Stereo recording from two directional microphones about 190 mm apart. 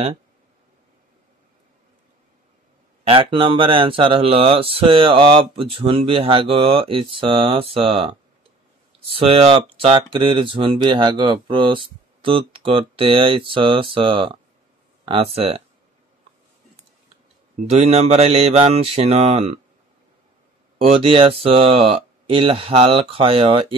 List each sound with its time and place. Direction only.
3.0 s speech: 30° right (ahead or behind)
15.0 s mantra: 30° right (ahead or behind)
17.6 s mantra: 35° right (ahead or behind)
20.8 s speech: 30° right (ahead or behind)